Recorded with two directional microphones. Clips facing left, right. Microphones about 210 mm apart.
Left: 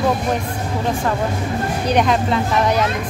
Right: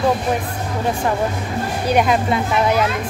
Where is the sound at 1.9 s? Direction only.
5° right (ahead or behind).